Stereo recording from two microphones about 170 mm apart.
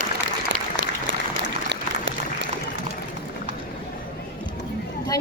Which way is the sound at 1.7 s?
90° right.